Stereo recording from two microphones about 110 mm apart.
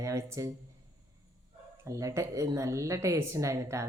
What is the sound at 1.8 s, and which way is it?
Speech, 30° right (ahead or behind).